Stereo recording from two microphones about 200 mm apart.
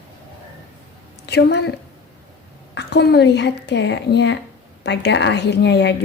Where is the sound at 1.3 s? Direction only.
55° left (ahead or behind).